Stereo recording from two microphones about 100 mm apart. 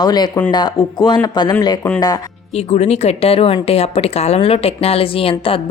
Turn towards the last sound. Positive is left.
turn(degrees=65)  # may be behind; listen again after turning